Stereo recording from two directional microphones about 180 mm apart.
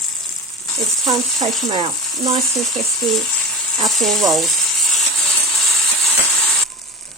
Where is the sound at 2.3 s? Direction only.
Centre (ahead or behind).